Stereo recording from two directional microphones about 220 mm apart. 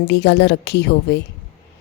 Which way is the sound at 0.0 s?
50° left (ahead or behind).